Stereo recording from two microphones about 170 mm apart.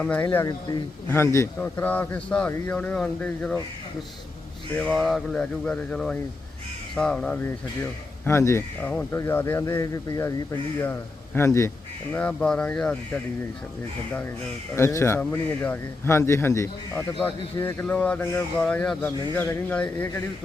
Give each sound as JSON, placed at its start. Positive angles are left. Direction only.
{"t": 0.0, "sound": "a man's voice", "side_deg": 5}
{"t": 4.7, "sound": "a man's voice", "side_deg": 5}
{"t": 11.3, "sound": "a man's voice", "side_deg": 15}
{"t": 12.1, "sound": "speech", "side_deg": 5}
{"t": 14.8, "sound": "a man's voice", "side_deg": 15}